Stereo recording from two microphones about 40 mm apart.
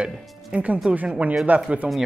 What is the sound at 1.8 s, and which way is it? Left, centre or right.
Speech, centre.